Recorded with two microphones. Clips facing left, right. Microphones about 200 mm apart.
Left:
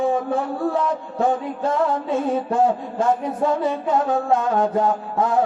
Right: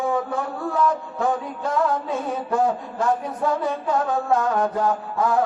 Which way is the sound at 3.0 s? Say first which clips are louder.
Left 3 dB; 25° left (ahead or behind).